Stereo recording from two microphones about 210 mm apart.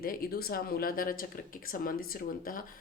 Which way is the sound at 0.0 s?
45° left (ahead or behind).